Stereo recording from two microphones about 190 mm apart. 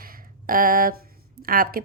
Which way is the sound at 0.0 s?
50° right (ahead or behind).